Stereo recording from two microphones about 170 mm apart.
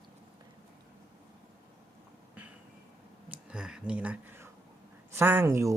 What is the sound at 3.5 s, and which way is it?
Speech, 5° right (ahead or behind).